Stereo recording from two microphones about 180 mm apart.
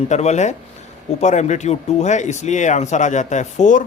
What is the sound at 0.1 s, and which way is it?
Speech, 40° left (ahead or behind).